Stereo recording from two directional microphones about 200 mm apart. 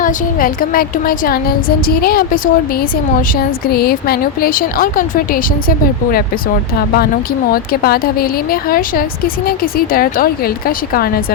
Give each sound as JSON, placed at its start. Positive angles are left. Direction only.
{"t": 0.0, "sound": "a woman's voice", "side_deg": 45}